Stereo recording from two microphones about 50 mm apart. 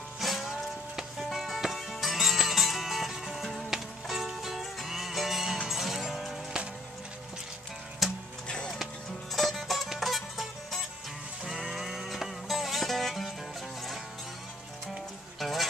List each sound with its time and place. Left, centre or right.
0.2 s music: centre
8.0 s music: centre
8.5 s music: centre
9.3 s music: centre
15.3 s music: centre